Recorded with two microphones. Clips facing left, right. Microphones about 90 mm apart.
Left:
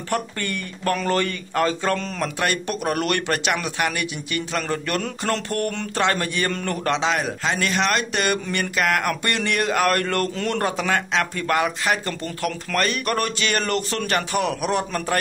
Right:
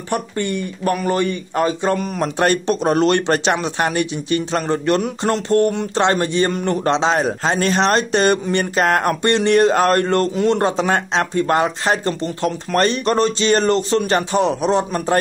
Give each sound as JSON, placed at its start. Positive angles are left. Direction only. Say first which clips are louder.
{"t": 0.1, "sound": "speech", "louder": "right 5 dB", "side_deg": -20}